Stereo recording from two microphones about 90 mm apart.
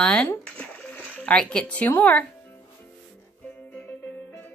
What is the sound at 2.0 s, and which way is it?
Speech, 15° left (ahead or behind).